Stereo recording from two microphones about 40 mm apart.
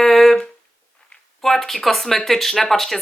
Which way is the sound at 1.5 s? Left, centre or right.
Centre.